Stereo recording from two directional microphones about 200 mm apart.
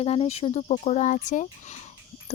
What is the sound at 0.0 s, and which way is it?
Speech, 30° left (ahead or behind).